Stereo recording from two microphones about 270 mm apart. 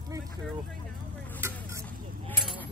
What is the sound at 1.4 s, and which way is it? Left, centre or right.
Vehicle, centre.